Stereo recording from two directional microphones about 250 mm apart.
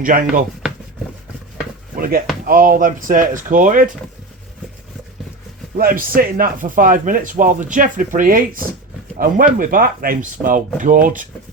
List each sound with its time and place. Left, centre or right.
0.0 s speech: right
2.0 s speech: right
5.7 s speech: right